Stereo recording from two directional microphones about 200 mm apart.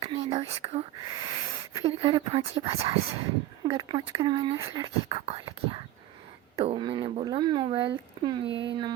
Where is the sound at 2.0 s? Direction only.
25° right (ahead or behind).